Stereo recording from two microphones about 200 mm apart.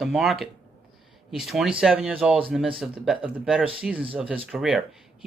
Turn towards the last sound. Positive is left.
turn(degrees=-5)  # may be behind; listen again after turning